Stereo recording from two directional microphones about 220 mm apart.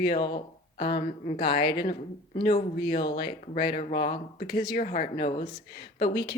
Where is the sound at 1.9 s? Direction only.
40° left (ahead or behind).